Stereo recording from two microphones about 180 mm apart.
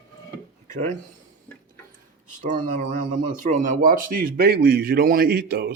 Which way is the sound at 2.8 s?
40° right (ahead or behind).